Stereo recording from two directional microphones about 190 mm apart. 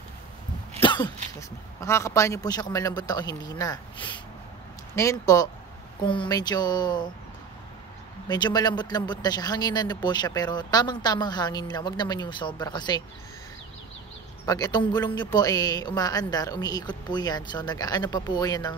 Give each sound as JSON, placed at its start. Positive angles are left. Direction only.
{"t": 0.8, "sound": "a sound", "side_deg": 25}
{"t": 1.8, "sound": "speech", "side_deg": 15}
{"t": 8.3, "sound": "speech", "side_deg": 20}
{"t": 14.4, "sound": "speech", "side_deg": 20}